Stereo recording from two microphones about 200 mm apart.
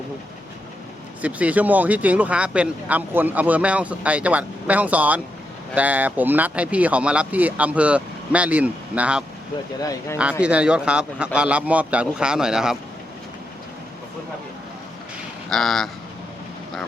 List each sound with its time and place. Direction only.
1.2 s speech: 5° right (ahead or behind)
9.8 s speech: 15° left (ahead or behind)
10.4 s a man's voice: 5° right (ahead or behind)
15.4 s a man's voice: centre (ahead or behind)